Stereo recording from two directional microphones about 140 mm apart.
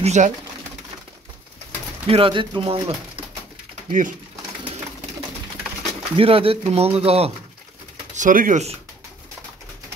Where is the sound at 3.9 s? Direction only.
65° right (ahead or behind).